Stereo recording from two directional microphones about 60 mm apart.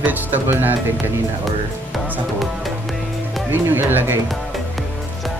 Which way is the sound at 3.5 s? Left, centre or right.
Right.